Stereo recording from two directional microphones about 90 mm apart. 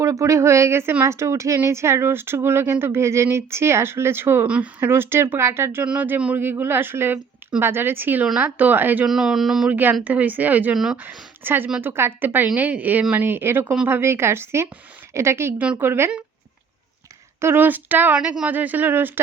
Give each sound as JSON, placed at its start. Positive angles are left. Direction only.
{"t": 0.0, "sound": "speech", "side_deg": -35}
{"t": 4.4, "sound": "speech", "side_deg": -10}
{"t": 4.8, "sound": "speech", "side_deg": -25}
{"t": 5.9, "sound": "speech", "side_deg": -15}
{"t": 9.0, "sound": "speech", "side_deg": -5}
{"t": 9.6, "sound": "speech", "side_deg": -20}
{"t": 17.4, "sound": "speech", "side_deg": -25}